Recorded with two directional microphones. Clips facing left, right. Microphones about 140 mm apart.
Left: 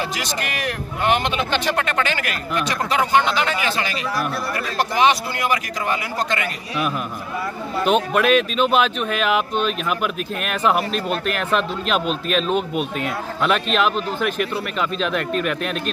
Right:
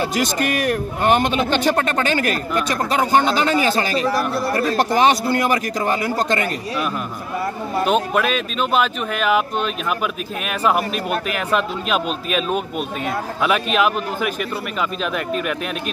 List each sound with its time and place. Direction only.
0.2 s a man's voice: 45° right (ahead or behind)
7.8 s a man's voice: centre (ahead or behind)